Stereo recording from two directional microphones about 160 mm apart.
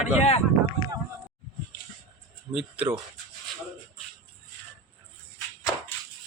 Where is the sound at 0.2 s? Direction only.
40° left (ahead or behind).